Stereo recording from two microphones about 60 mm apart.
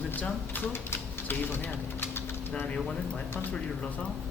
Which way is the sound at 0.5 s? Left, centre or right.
Left.